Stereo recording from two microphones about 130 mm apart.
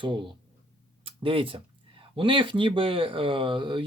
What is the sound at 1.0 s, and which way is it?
Speech, 40° right (ahead or behind).